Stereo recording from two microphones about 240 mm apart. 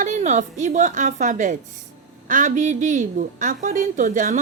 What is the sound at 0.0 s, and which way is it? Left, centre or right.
A woman's voice, right.